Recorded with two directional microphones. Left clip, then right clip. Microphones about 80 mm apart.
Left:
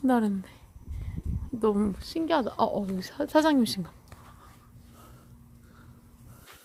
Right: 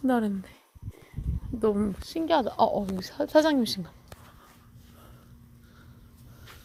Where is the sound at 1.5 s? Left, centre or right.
Left.